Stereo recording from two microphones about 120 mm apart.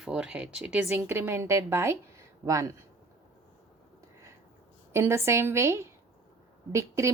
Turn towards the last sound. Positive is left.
turn(degrees=-25)  # may be behind; listen again after turning